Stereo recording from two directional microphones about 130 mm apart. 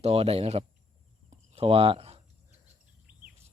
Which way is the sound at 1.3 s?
50° right (ahead or behind).